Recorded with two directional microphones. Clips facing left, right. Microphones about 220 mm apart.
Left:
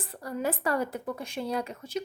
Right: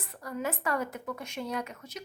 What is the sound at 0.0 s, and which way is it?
Speech, 30° left (ahead or behind).